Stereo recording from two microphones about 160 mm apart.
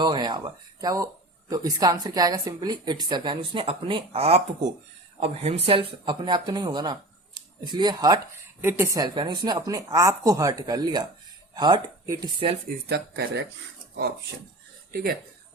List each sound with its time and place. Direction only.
0.0 s speech: 25° right (ahead or behind)
12.9 s speech: 90° right